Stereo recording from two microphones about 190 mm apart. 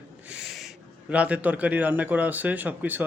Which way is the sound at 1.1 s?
5° right (ahead or behind).